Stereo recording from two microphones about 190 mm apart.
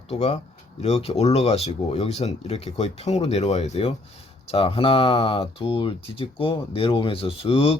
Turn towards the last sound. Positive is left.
turn(degrees=30)  # may be behind; listen again after turning